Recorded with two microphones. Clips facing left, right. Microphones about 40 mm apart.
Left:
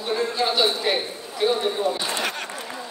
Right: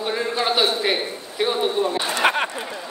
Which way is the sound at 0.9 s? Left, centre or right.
Right.